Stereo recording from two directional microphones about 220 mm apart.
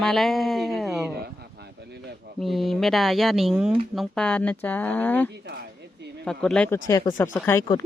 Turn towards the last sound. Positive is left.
turn(degrees=10)  # may be behind; listen again after turning